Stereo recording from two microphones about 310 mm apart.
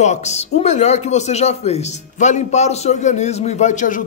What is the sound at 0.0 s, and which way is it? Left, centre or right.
Speech, left.